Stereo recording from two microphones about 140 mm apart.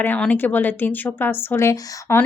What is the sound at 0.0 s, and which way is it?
Speech, 10° left (ahead or behind).